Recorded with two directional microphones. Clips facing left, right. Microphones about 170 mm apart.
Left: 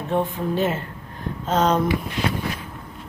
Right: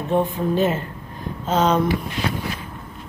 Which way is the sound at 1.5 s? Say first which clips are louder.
Right 1 dB; centre (ahead or behind).